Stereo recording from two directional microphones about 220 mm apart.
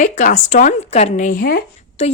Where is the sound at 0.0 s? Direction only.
35° left (ahead or behind).